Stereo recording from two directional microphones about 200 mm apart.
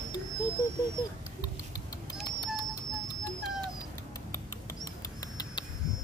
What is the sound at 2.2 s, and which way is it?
Bird, 20° left (ahead or behind).